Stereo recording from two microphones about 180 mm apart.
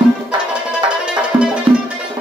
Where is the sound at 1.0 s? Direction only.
5° right (ahead or behind).